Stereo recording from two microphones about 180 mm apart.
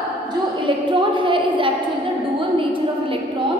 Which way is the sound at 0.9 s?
25° right (ahead or behind).